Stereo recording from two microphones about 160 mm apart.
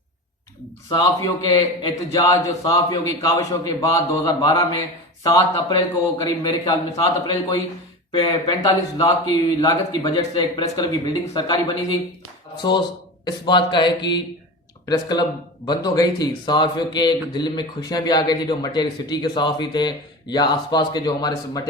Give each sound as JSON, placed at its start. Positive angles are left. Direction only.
{"t": 0.9, "sound": "a man's voice", "side_deg": 25}
{"t": 13.2, "sound": "a man's voice", "side_deg": 30}